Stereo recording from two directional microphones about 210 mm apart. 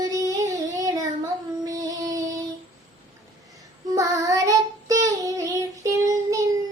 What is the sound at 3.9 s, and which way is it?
Child singing, 15° right (ahead or behind).